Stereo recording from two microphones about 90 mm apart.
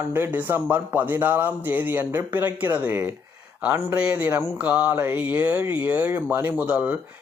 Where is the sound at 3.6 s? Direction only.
20° right (ahead or behind).